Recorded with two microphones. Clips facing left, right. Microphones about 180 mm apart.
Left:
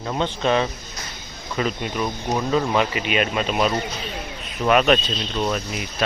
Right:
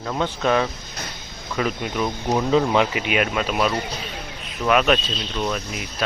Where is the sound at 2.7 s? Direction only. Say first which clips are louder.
Right 1 dB; 10° right (ahead or behind).